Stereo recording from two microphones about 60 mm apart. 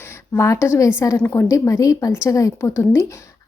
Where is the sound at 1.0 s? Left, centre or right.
Left.